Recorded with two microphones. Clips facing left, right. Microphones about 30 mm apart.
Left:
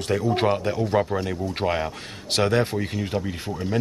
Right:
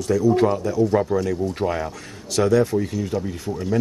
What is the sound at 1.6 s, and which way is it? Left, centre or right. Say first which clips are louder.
Speech: left 2 dB; left.